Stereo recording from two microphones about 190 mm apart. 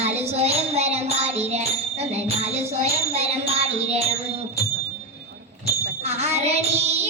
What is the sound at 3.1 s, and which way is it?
Music, 35° right (ahead or behind).